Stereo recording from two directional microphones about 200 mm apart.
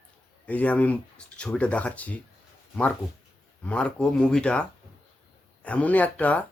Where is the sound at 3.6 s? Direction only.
5° left (ahead or behind).